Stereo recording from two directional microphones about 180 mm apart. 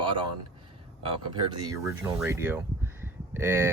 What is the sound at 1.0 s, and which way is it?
Speech, 25° right (ahead or behind).